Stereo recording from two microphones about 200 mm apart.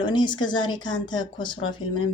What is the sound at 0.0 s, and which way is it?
Speech, 25° left (ahead or behind).